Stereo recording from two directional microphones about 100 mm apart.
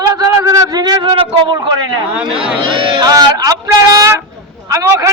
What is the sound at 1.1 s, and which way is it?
Speech, 60° right (ahead or behind).